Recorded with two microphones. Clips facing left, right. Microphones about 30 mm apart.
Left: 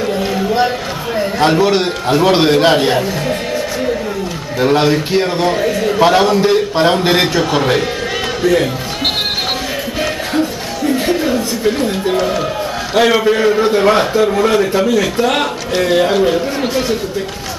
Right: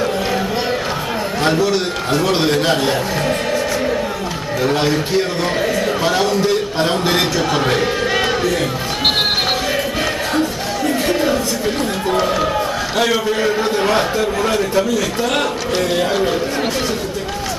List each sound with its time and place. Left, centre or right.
0.0 s a sound: centre
1.4 s a man's voice: left
4.6 s a man's voice: centre
5.6 s a man's voice: centre
5.9 s a man's voice: centre
7.6 s speech: centre
10.9 s crowd: centre
11.6 s a man's voice: centre